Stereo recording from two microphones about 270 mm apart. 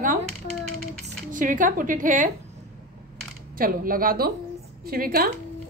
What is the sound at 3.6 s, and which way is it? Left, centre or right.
A woman's voice, right.